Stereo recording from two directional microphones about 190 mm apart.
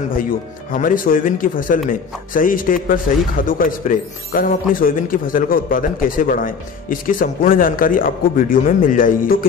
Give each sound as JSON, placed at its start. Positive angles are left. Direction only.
{"t": 0.1, "sound": "a man's voice", "side_deg": 45}